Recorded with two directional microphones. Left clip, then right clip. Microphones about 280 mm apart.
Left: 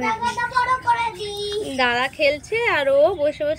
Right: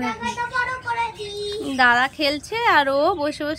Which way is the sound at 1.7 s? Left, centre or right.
Right.